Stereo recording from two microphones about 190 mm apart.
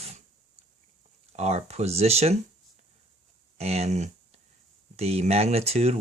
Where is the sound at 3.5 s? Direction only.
35° right (ahead or behind).